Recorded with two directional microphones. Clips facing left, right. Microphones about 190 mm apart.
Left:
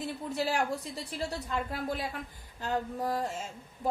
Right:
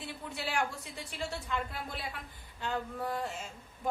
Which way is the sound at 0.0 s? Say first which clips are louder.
Left 7 dB; 40° left (ahead or behind).